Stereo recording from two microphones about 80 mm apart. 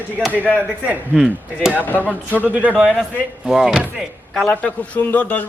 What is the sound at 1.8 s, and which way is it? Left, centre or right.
Speech, left.